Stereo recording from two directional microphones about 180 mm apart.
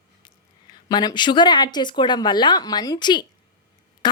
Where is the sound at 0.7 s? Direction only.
20° left (ahead or behind).